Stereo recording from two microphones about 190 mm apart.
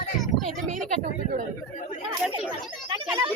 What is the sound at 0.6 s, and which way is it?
Speech, 40° right (ahead or behind).